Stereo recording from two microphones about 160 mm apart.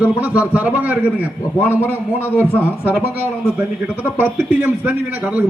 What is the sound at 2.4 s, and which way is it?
Speech, 10° right (ahead or behind).